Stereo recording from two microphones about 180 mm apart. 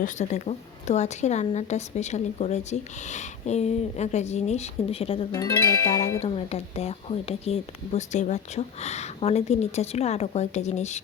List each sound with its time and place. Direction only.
0.0 s a woman's voice: 40° left (ahead or behind)
5.3 s music: 20° left (ahead or behind)
6.2 s a woman's voice: 35° left (ahead or behind)